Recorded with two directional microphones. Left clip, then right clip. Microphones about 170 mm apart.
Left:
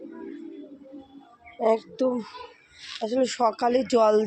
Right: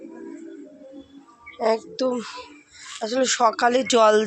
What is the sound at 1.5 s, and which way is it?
Speech, 15° left (ahead or behind).